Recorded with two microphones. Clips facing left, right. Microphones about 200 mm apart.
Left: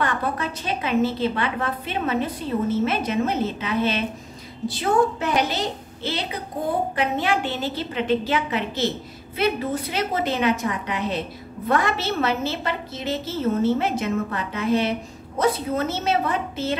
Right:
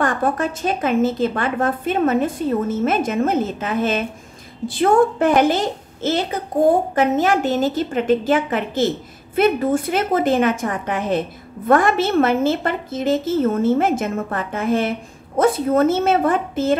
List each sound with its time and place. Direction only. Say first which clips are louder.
0.0 s a woman's voice: right 5 dB; 45° right (ahead or behind)